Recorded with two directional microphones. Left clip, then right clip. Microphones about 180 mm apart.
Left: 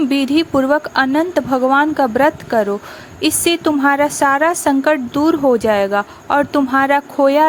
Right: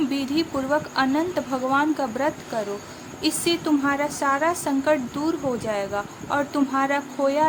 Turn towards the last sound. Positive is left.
turn(degrees=45)  # may be behind; listen again after turning